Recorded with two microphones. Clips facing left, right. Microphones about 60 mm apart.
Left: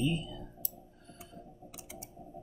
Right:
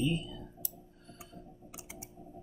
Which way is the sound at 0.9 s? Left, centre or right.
Centre.